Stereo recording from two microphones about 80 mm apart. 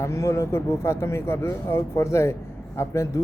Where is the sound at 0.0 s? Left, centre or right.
Left.